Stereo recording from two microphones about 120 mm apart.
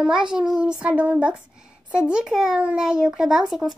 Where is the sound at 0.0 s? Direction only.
5° right (ahead or behind).